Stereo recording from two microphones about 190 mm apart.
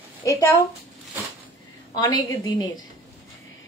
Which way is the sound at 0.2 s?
15° left (ahead or behind).